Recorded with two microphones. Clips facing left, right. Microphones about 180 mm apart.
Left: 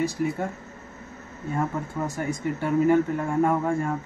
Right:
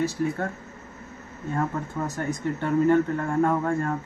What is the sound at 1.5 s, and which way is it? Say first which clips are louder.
Speech: even; 10° left (ahead or behind).